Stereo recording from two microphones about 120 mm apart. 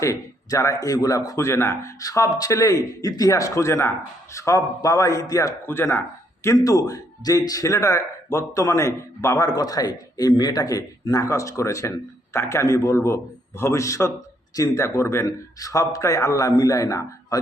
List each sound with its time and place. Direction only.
0.0 s a man's voice: 25° left (ahead or behind)